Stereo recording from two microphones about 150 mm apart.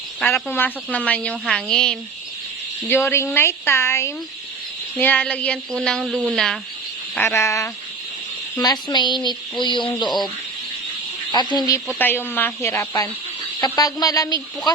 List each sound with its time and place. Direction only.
0.2 s a woman's voice: 5° left (ahead or behind)
2.9 s a woman's voice: 15° left (ahead or behind)
7.2 s a woman's voice: 15° left (ahead or behind)
11.5 s a woman's voice: 25° left (ahead or behind)